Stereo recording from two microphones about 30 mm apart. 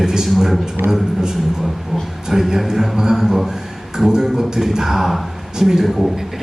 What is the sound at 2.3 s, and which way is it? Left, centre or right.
Speech, centre.